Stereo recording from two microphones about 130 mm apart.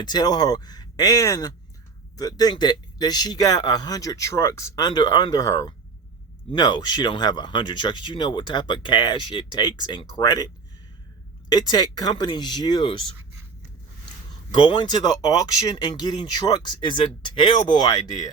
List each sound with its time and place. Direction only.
0.0 s speech: 30° left (ahead or behind)
14.5 s speech: 35° left (ahead or behind)